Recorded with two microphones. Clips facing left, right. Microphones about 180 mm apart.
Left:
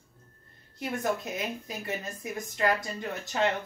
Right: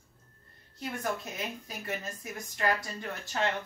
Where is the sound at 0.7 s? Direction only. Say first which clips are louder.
Left 4 dB; 20° left (ahead or behind).